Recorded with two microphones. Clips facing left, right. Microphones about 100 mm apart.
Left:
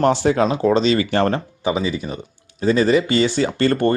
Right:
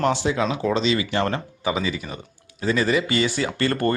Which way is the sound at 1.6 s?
25° left (ahead or behind).